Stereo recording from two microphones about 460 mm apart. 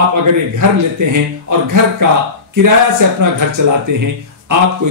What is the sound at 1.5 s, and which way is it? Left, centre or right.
Speech, right.